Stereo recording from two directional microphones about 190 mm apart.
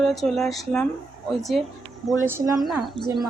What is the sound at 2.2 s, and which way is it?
Speech, 15° right (ahead or behind).